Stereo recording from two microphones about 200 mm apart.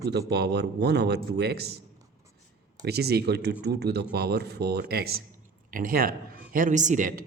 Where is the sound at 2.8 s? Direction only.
50° right (ahead or behind).